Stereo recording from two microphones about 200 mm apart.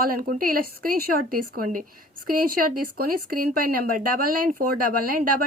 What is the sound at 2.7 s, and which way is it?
A woman's voice, 45° right (ahead or behind).